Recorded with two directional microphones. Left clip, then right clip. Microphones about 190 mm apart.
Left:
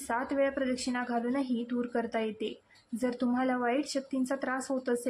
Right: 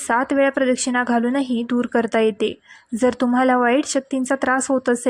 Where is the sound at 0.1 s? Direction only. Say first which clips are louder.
Right 12 dB; 45° right (ahead or behind).